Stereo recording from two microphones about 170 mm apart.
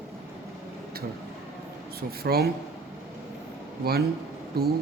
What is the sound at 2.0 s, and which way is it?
Speech, 65° right (ahead or behind).